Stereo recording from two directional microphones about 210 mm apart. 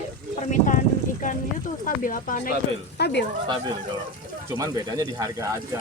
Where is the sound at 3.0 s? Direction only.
50° left (ahead or behind).